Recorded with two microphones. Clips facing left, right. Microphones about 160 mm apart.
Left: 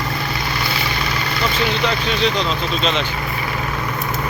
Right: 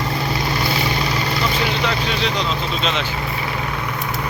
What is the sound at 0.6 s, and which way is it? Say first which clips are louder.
Vehicle: right 2 dB; 40° right (ahead or behind).